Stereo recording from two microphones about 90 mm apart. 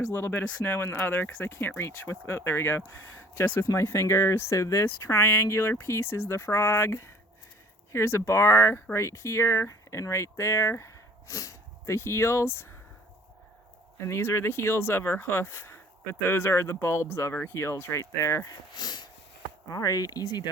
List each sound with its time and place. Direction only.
0.1 s speech: 25° left (ahead or behind)
14.0 s speech: 30° left (ahead or behind)
18.7 s a sound: 50° left (ahead or behind)
19.6 s speech: 40° left (ahead or behind)